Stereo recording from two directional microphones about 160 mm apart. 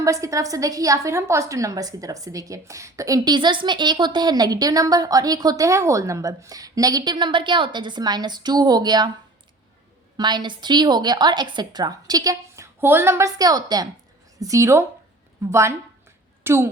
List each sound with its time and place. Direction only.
0.0 s a woman's voice: 20° right (ahead or behind)
10.2 s a woman's voice: 25° right (ahead or behind)